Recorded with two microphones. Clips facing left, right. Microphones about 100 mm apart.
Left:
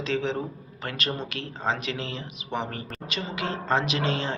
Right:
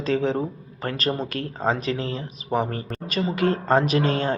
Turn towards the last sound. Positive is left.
turn(degrees=-45)  # may be behind; listen again after turning